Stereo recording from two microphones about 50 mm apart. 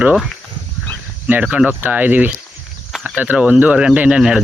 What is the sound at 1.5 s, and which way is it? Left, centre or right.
Speech, right.